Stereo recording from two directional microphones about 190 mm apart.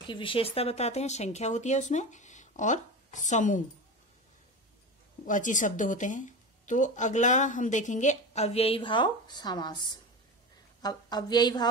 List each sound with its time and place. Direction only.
0.1 s speech: 25° left (ahead or behind)
5.2 s speech: 40° left (ahead or behind); by 9.8 s 20° left (ahead or behind)
10.8 s a woman's voice: 20° left (ahead or behind)